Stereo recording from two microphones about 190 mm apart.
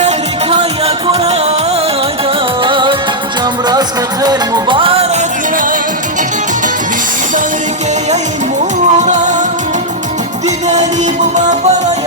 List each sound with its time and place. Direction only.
0.5 s music: 30° right (ahead or behind)
2.6 s music: 25° right (ahead or behind)
9.0 s music: 40° right (ahead or behind)